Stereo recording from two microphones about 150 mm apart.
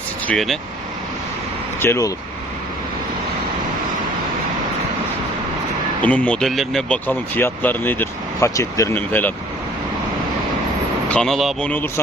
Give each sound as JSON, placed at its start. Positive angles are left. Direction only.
{"t": 0.3, "sound": "speech", "side_deg": 0}
{"t": 1.8, "sound": "speech", "side_deg": 20}
{"t": 6.0, "sound": "speech", "side_deg": 10}
{"t": 11.1, "sound": "speech", "side_deg": 5}